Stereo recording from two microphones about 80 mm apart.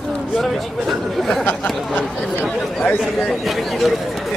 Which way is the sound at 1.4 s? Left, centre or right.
Left.